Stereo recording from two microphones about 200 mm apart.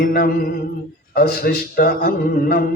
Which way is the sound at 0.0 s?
50° left (ahead or behind).